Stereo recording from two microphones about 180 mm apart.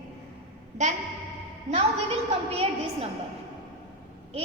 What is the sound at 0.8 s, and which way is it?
A woman's voice, 40° right (ahead or behind).